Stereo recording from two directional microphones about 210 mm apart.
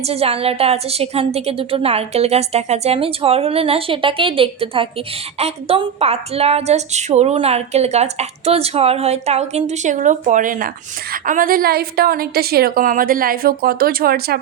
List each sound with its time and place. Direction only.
0.0 s a woman's voice: 30° right (ahead or behind); by 14.3 s 45° right (ahead or behind)